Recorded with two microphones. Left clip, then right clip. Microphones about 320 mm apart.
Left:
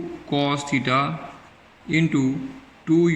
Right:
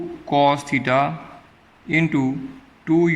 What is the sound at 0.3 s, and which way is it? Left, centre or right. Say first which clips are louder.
A man's voice: right 6 dB; centre.